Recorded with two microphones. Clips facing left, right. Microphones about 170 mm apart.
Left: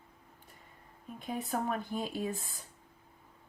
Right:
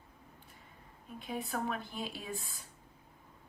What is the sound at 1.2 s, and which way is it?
Speech, 45° left (ahead or behind).